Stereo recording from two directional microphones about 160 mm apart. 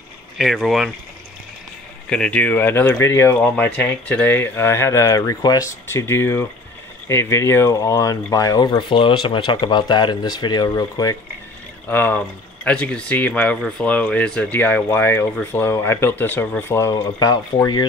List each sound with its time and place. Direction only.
0.4 s speech: centre (ahead or behind)
2.0 s speech: 5° left (ahead or behind); by 17.8 s 25° left (ahead or behind)